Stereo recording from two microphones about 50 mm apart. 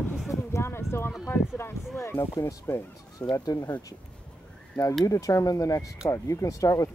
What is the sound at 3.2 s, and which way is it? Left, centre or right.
Speech, left.